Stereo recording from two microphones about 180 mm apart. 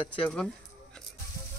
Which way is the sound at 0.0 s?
5° left (ahead or behind).